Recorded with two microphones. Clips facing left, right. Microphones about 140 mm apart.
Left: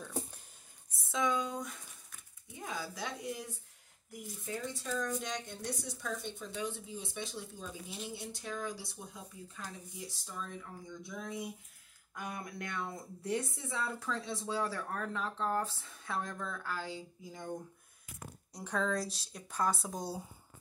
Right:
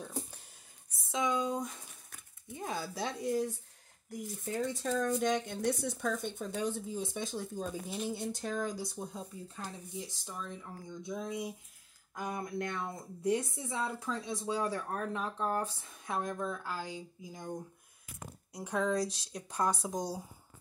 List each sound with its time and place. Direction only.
1.1 s a sound: 20° right (ahead or behind)
2.6 s a woman's voice: 35° right (ahead or behind)
4.8 s speech: 50° right (ahead or behind)
9.6 s speech: 25° right (ahead or behind)
18.5 s speech: 10° right (ahead or behind)